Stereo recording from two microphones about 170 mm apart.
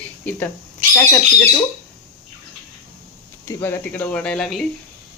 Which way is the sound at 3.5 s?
15° left (ahead or behind).